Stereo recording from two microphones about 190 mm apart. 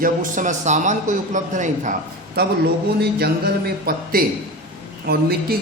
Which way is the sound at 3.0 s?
55° right (ahead or behind).